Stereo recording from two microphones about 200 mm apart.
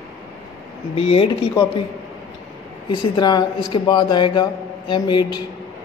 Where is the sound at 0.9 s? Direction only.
30° left (ahead or behind).